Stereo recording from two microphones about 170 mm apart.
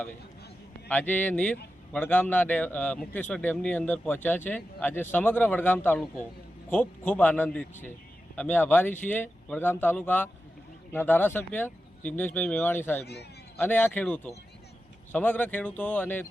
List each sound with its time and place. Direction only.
0.9 s a man's voice: 10° left (ahead or behind)